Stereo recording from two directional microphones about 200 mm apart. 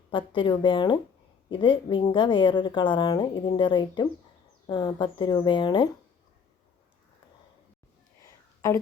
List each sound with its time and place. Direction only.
0.1 s speech: 25° left (ahead or behind)